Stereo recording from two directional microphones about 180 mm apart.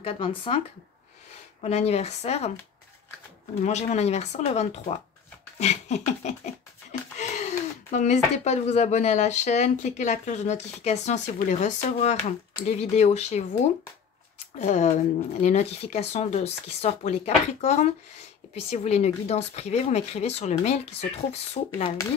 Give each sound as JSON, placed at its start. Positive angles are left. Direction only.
{"t": 0.0, "sound": "speech", "side_deg": 30}
{"t": 1.6, "sound": "speech", "side_deg": 35}
{"t": 3.6, "sound": "speech", "side_deg": 40}
{"t": 14.6, "sound": "speech", "side_deg": 40}